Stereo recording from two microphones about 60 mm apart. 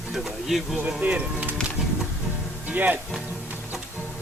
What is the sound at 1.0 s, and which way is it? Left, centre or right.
Speech, right.